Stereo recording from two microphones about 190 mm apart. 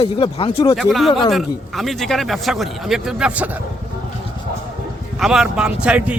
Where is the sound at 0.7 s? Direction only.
Centre (ahead or behind).